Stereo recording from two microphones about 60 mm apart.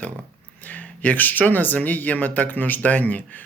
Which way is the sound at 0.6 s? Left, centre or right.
Left.